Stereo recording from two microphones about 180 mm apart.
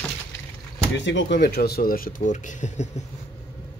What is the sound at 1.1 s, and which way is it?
Speech, 80° left.